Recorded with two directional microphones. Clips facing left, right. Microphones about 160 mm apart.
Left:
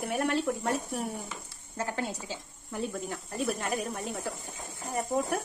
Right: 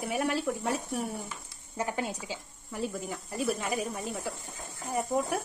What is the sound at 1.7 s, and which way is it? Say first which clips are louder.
Speech: right 1 dB; 15° right (ahead or behind).